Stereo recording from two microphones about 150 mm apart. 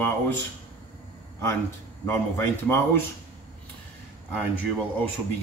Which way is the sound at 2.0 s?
15° left (ahead or behind).